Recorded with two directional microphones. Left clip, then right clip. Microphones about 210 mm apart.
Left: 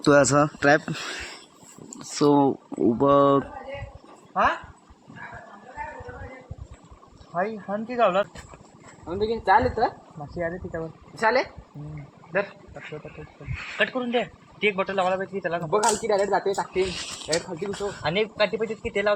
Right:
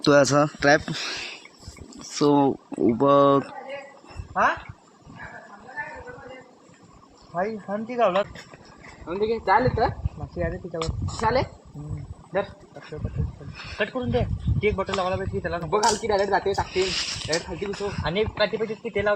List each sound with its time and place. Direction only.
0.0 s speech: 10° left (ahead or behind)
7.3 s a man's voice: 5° right (ahead or behind)
10.3 s speech: 20° left (ahead or behind)
11.2 s speech: 35° right (ahead or behind)
13.7 s a man's voice: centre (ahead or behind); by 15.7 s 20° left (ahead or behind)
15.7 s a man's voice: 5° right (ahead or behind)
18.0 s speech: 20° left (ahead or behind)